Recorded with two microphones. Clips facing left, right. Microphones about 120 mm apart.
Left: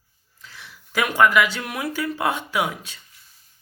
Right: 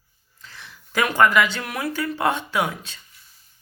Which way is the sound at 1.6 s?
20° left (ahead or behind).